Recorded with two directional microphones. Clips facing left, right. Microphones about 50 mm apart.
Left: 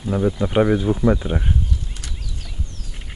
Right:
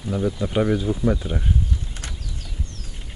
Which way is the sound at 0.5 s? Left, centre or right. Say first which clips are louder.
Left 4 dB; left.